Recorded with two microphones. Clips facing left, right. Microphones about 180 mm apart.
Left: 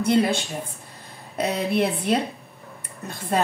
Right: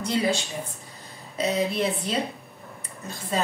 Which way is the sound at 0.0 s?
55° left (ahead or behind).